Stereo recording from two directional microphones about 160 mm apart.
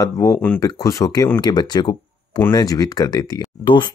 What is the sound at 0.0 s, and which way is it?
Speech, 20° left (ahead or behind).